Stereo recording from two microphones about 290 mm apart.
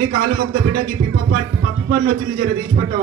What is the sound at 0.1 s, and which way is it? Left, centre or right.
A man's voice, right.